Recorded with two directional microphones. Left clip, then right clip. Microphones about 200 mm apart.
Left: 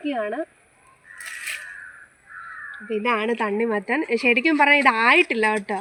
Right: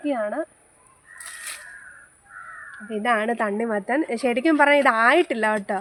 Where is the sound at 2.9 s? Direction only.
30° right (ahead or behind).